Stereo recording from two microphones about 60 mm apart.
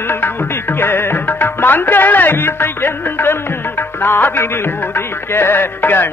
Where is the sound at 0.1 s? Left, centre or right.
Left.